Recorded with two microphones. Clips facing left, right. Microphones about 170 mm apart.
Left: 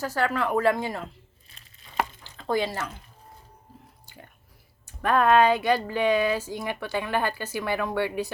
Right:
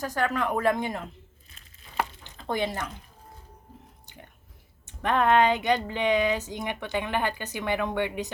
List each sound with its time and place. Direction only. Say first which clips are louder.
0.0 s speech: left 1 dB; 15° right (ahead or behind)
2.2 s a sound: left 4 dB; 20° right (ahead or behind)
4.9 s speech: left 2 dB; 20° right (ahead or behind)